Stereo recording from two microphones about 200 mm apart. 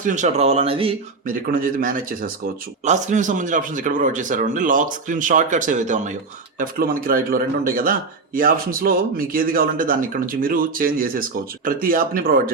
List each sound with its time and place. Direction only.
0.0 s speech: 40° right (ahead or behind)
1.3 s a man's voice: 45° right (ahead or behind)